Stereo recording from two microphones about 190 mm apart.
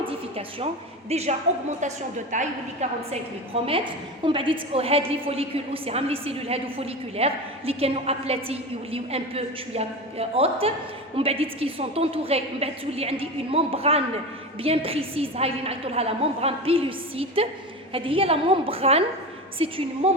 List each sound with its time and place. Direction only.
0.0 s a woman's voice: 30° right (ahead or behind)
3.1 s a woman's voice: 30° right (ahead or behind)